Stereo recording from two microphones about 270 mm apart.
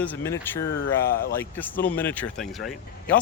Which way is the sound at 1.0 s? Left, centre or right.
Left.